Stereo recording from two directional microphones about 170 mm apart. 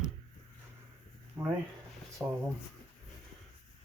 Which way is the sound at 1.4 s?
25° right (ahead or behind).